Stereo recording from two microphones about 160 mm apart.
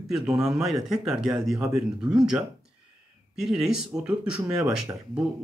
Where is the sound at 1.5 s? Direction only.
20° right (ahead or behind).